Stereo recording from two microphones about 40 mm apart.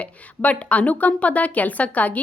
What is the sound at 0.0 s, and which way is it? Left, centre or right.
A woman's voice, left.